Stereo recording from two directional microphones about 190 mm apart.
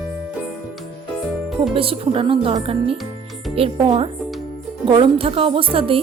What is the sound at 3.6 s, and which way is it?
Speech, 30° right (ahead or behind).